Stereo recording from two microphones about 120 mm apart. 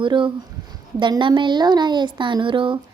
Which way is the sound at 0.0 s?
45° right (ahead or behind).